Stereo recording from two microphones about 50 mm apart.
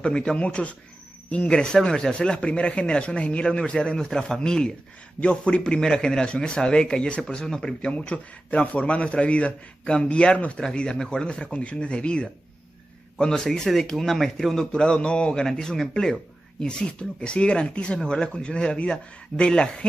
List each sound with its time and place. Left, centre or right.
0.0 s speech: centre
7.9 s speech: left